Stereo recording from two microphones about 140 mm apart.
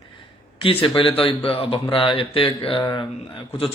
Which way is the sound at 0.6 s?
40° left (ahead or behind).